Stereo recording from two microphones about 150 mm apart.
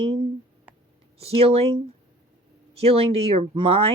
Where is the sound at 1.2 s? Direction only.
40° right (ahead or behind).